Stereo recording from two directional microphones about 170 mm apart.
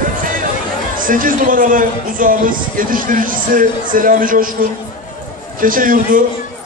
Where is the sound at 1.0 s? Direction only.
55° right (ahead or behind).